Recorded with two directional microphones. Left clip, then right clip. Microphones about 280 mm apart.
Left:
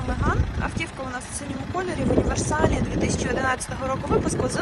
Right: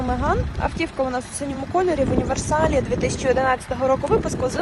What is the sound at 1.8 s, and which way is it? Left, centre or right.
Speech, centre.